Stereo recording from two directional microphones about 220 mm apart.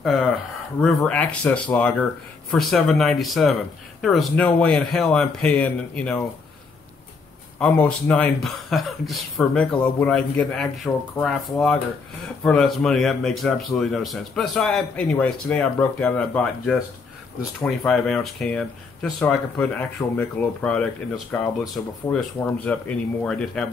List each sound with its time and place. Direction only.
0.7 s speech: centre (ahead or behind)
7.5 s speech: 5° left (ahead or behind)
12.4 s speech: centre (ahead or behind)